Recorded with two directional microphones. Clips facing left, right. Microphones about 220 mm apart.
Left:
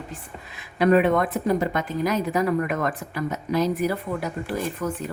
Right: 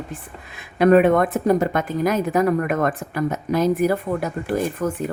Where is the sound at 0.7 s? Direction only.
50° right (ahead or behind).